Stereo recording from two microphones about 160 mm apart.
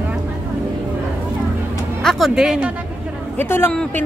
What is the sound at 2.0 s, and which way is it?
Speech, centre (ahead or behind).